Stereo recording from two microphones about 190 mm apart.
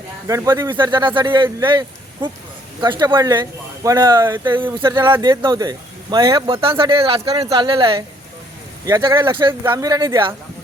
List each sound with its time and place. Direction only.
0.3 s speech: 15° right (ahead or behind)
2.8 s speech: 25° right (ahead or behind)